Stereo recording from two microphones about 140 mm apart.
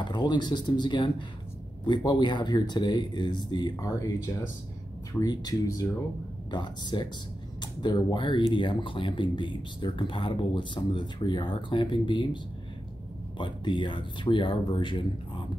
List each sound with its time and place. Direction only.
0.0 s speech: 30° left (ahead or behind)
5.2 s speech: 30° left (ahead or behind)
13.4 s speech: 35° left (ahead or behind)